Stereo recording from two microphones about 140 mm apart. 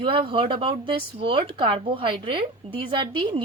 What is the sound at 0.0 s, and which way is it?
Speech, 40° right (ahead or behind).